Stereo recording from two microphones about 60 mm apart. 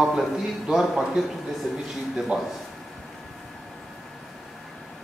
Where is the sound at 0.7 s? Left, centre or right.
Centre.